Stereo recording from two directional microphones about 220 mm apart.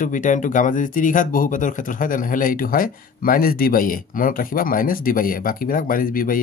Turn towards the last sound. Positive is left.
turn(degrees=40)  # may be behind; listen again after turning